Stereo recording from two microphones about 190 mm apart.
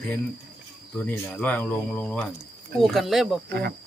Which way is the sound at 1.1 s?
10° left (ahead or behind).